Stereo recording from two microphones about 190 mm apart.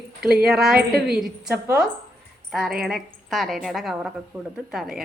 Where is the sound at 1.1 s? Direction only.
5° right (ahead or behind).